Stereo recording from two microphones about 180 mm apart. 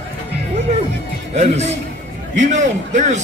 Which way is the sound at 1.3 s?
40° right (ahead or behind).